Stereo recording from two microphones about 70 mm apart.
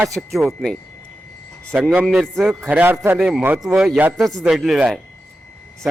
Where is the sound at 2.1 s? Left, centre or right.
Centre.